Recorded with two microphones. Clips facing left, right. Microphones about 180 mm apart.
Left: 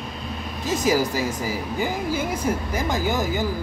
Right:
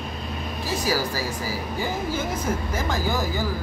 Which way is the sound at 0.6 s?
20° left (ahead or behind).